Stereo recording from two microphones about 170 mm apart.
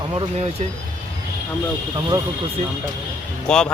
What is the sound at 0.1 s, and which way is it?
Speech, 35° right (ahead or behind).